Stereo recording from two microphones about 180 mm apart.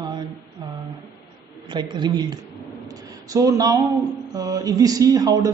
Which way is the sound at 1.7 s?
25° right (ahead or behind).